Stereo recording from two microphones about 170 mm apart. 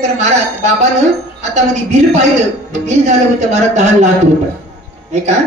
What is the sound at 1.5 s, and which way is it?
Speech, 40° right (ahead or behind).